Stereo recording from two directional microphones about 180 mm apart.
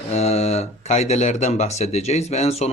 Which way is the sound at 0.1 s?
35° left (ahead or behind).